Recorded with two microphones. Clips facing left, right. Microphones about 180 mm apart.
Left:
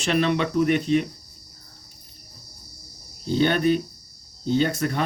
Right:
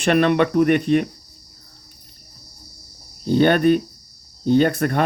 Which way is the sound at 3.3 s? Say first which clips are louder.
Right 5 dB; 55° right (ahead or behind).